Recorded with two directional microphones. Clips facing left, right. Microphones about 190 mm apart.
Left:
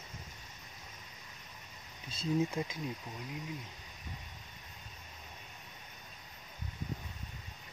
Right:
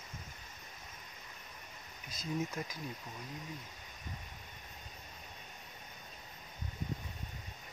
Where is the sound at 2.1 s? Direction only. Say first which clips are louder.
Left 6 dB; 30° left (ahead or behind).